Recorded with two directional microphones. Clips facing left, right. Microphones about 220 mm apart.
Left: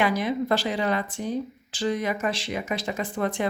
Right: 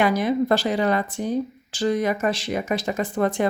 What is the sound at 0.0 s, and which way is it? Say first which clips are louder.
Speech: right 4 dB; 40° right (ahead or behind).